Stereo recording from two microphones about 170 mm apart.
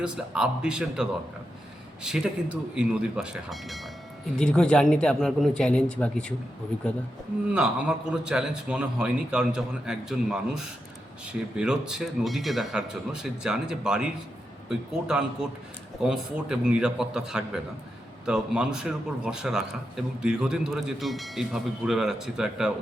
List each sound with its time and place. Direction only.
0.0 s a man's voice: 5° right (ahead or behind)
7.5 s a man's voice: 5° right (ahead or behind)